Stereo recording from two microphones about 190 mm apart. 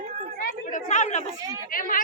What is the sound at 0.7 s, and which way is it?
Chatter, 40° left (ahead or behind).